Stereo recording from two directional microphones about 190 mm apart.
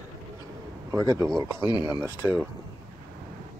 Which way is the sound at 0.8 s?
15° right (ahead or behind).